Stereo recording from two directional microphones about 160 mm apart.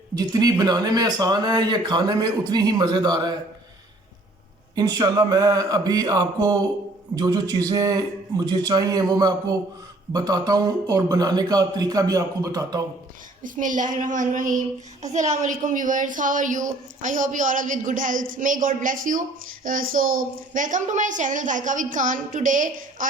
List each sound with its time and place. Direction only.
0.2 s speech: 25° right (ahead or behind)
4.7 s speech: 25° right (ahead or behind)
13.4 s a woman's voice: 55° right (ahead or behind)